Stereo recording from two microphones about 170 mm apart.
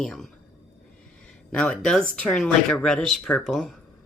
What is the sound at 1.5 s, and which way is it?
Speech, 5° left (ahead or behind).